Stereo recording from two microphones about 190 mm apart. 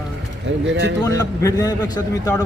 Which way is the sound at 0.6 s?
70° right (ahead or behind).